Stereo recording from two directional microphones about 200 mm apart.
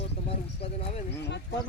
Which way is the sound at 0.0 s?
30° left (ahead or behind).